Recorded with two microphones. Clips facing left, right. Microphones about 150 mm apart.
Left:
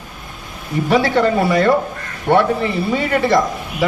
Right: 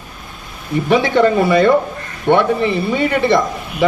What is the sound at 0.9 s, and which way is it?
Speech, 5° left (ahead or behind).